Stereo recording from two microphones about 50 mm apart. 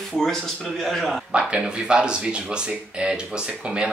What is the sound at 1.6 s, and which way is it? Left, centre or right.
Speech, centre.